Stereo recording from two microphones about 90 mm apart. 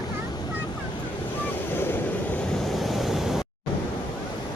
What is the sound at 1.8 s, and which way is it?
Vehicle, 25° left (ahead or behind).